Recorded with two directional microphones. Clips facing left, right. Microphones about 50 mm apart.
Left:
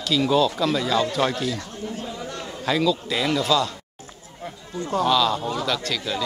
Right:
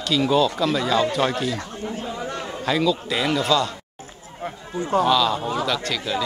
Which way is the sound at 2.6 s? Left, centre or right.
Centre.